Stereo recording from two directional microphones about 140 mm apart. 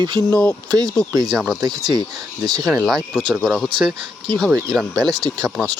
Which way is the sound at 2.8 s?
Centre (ahead or behind).